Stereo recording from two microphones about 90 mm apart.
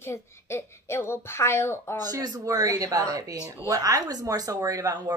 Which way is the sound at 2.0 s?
45° right (ahead or behind).